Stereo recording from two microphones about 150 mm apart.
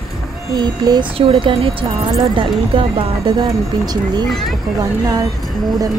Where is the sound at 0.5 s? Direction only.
30° right (ahead or behind).